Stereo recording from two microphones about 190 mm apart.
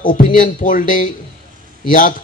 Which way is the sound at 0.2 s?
45° left (ahead or behind).